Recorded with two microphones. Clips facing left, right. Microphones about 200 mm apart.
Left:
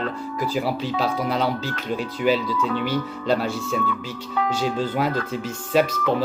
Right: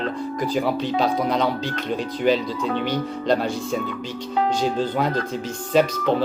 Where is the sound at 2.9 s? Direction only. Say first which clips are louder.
Right 1 dB; 5° left (ahead or behind).